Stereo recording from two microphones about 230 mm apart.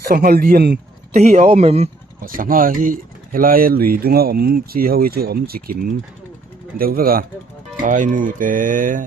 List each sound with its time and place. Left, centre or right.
0.1 s speech: right
1.1 s speech: right